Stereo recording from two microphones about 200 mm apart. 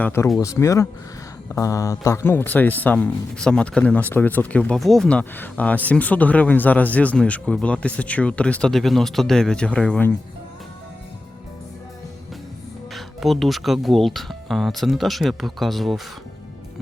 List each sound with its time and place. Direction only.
0.0 s speech: 10° left (ahead or behind)
12.9 s speech: centre (ahead or behind)